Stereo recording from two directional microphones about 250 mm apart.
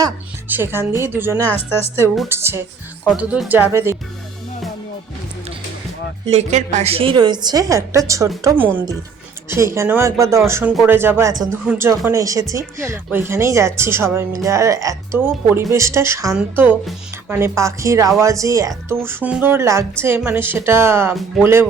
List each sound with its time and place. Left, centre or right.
0.0 s speech: centre
6.2 s speech: right; by 21.7 s centre